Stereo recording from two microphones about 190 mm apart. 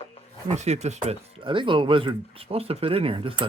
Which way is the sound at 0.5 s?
35° right (ahead or behind).